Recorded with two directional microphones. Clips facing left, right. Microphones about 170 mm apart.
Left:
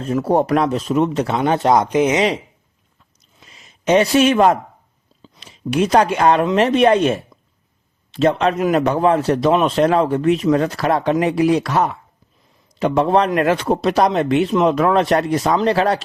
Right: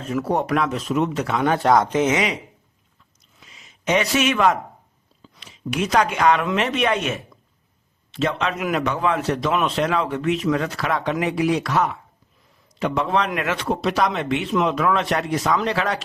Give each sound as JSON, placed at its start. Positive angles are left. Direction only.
{"t": 0.0, "sound": "a man's voice", "side_deg": 35}
{"t": 3.4, "sound": "a sound", "side_deg": 40}
{"t": 5.2, "sound": "a man's voice", "side_deg": 35}